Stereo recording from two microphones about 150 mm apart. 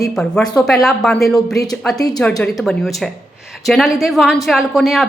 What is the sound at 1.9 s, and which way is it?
Speech, 25° left (ahead or behind).